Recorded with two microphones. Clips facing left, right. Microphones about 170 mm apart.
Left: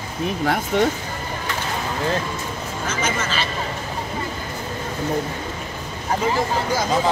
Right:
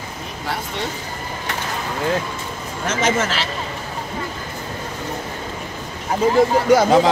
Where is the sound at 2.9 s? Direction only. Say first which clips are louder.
Right 6 dB; 85° right.